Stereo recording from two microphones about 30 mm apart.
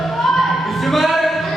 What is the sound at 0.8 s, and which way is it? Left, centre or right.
Music, centre.